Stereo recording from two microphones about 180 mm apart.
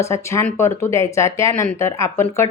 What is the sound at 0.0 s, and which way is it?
Speech, 15° left (ahead or behind).